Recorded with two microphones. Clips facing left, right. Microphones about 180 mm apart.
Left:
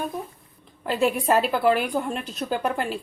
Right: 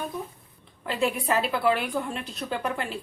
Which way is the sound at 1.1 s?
45° left (ahead or behind).